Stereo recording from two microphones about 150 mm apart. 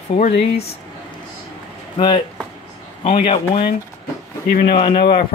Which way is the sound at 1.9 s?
30° left (ahead or behind).